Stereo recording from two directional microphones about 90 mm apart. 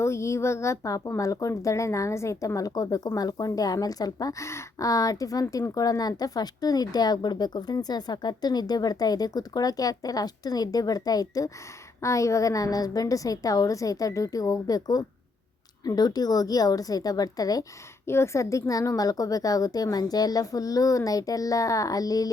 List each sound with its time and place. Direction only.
0.0 s a woman's voice: 30° left (ahead or behind)
18.1 s a woman's voice: 30° left (ahead or behind)